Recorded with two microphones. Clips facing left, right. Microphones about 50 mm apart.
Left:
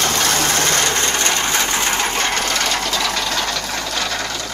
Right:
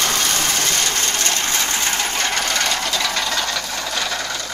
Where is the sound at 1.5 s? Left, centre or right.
Centre.